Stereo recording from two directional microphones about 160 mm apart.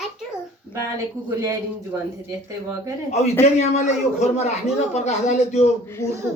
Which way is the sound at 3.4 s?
45° left (ahead or behind).